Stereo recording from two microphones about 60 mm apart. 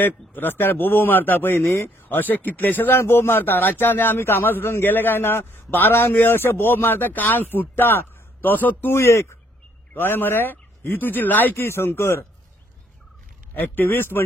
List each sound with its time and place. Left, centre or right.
0.0 s speech: left
8.9 s speech: left
9.9 s speech: left
13.6 s speech: left